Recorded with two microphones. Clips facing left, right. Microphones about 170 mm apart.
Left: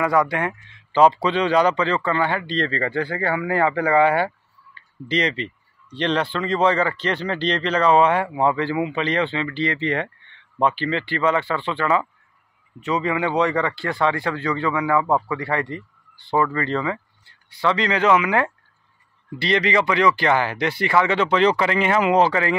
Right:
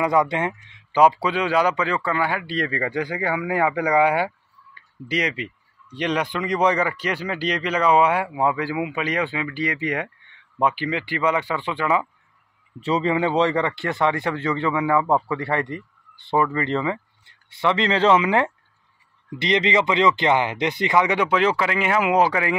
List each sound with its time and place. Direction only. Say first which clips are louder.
0.0 s speech: even; 20° right (ahead or behind)
12.8 s speech: right 1 dB; 30° right (ahead or behind); by 22.6 s 10° right (ahead or behind)